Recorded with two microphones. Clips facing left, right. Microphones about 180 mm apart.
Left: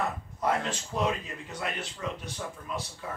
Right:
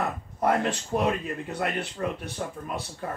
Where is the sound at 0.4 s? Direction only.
60° right (ahead or behind).